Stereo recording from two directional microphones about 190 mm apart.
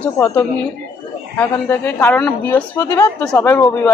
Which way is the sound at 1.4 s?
15° left (ahead or behind).